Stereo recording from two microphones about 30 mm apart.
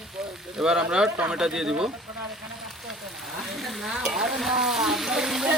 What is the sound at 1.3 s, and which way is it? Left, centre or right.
Speech, right.